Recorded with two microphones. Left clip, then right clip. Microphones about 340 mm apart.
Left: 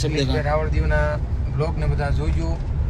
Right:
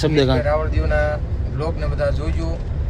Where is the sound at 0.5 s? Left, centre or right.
Centre.